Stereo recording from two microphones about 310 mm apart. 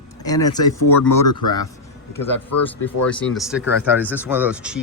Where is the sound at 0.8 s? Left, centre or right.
Left.